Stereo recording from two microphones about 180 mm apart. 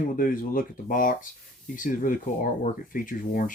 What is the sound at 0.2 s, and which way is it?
Speech, 50° left (ahead or behind).